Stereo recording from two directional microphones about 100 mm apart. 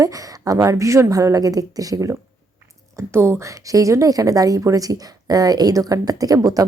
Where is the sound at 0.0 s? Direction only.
35° right (ahead or behind).